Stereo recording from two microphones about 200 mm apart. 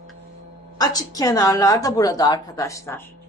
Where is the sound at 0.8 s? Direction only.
20° left (ahead or behind).